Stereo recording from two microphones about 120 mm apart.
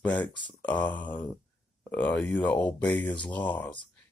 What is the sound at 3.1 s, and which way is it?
Speech, 40° left (ahead or behind).